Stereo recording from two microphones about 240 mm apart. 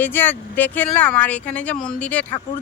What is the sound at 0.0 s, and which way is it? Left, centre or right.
Speech, centre.